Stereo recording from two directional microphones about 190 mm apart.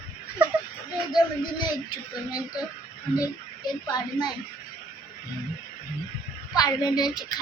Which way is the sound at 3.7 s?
20° left (ahead or behind).